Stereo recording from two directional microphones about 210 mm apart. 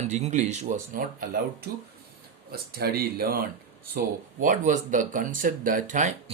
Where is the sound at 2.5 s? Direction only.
45° right (ahead or behind).